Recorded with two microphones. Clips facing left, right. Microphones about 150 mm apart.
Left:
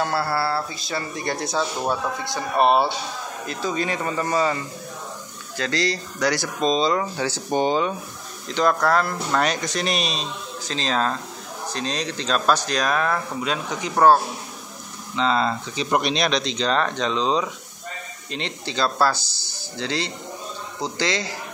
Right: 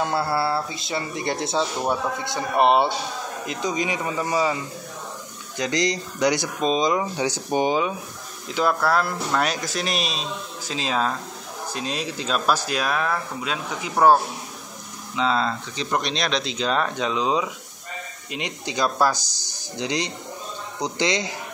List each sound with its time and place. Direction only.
0.0 s speech: 20° right (ahead or behind)
5.6 s speech: 15° right (ahead or behind)
15.4 s speech: 10° left (ahead or behind); by 21.4 s 20° right (ahead or behind)